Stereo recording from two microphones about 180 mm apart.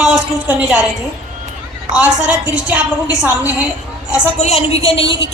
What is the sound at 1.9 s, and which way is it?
A woman's voice, 10° right (ahead or behind).